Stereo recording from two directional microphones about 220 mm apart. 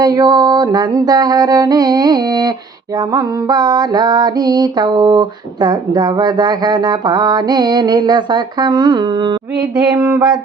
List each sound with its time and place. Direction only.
0.0 s music: 15° right (ahead or behind)
3.2 s a sound: 20° right (ahead or behind)
9.7 s music: 20° right (ahead or behind)